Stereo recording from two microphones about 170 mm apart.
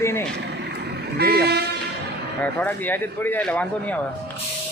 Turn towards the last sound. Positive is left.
turn(degrees=10)  # may be behind; listen again after turning